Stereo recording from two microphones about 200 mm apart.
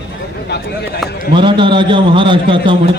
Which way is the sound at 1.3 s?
25° right (ahead or behind).